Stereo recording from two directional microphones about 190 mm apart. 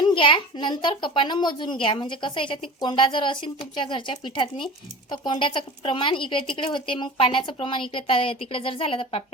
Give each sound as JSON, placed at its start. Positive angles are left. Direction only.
{"t": 0.0, "sound": "a woman's voice", "side_deg": 25}